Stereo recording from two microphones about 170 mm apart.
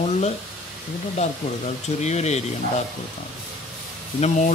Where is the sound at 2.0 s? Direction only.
40° left (ahead or behind).